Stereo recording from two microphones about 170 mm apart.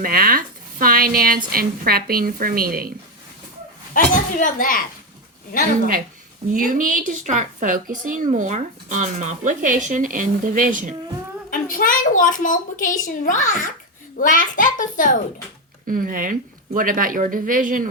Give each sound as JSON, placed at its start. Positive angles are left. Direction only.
{"t": 0.0, "sound": "a woman's voice", "side_deg": -60}
{"t": 3.9, "sound": "a woman's voice", "side_deg": 50}
{"t": 6.5, "sound": "a woman's voice", "side_deg": -55}
{"t": 11.5, "sound": "a woman's voice", "side_deg": 55}
{"t": 15.9, "sound": "a woman's voice", "side_deg": -55}